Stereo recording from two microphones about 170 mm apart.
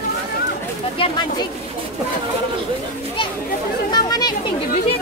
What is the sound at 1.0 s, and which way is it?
Speech, 30° left (ahead or behind).